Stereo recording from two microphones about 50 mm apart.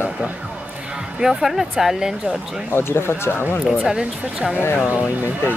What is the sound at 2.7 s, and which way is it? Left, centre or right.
Speech, left.